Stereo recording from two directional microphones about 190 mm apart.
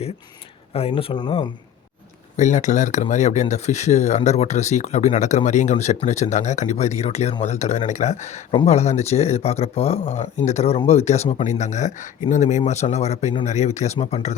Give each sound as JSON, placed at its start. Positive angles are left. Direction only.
{"t": 0.7, "sound": "speech", "side_deg": 30}
{"t": 2.3, "sound": "speech", "side_deg": 40}